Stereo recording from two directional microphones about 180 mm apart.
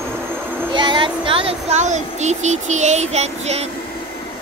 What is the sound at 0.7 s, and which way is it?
Speech, 25° right (ahead or behind).